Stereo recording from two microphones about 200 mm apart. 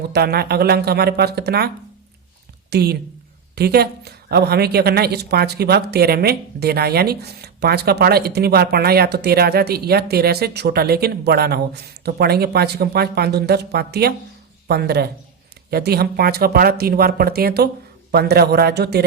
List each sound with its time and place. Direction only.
0.1 s a woman's voice: 50° right (ahead or behind)